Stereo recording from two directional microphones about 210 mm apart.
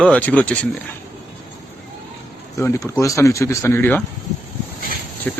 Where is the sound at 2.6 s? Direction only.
15° left (ahead or behind).